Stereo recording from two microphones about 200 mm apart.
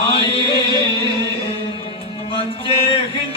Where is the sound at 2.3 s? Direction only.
30° left (ahead or behind).